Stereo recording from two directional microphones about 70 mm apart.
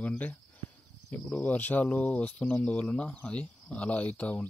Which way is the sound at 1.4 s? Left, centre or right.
Left.